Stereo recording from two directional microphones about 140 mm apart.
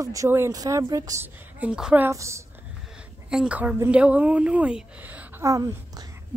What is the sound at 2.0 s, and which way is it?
Speech, 20° right (ahead or behind).